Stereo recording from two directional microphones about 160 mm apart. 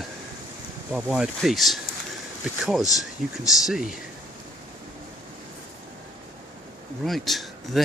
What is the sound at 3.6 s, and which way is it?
Speech, 5° right (ahead or behind).